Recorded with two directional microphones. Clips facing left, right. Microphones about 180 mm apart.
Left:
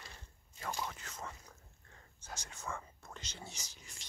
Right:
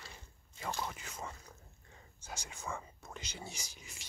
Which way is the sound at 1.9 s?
10° right (ahead or behind).